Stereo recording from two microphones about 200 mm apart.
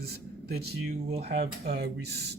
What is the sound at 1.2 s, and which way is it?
Speech, 50° right (ahead or behind).